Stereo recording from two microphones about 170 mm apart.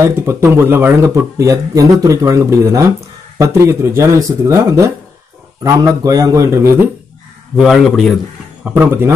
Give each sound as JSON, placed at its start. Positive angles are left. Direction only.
{"t": 0.0, "sound": "a man's voice", "side_deg": -15}
{"t": 7.5, "sound": "a man's voice", "side_deg": 0}
{"t": 8.6, "sound": "speech", "side_deg": -10}